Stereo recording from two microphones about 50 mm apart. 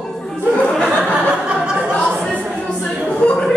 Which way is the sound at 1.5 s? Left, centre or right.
Right.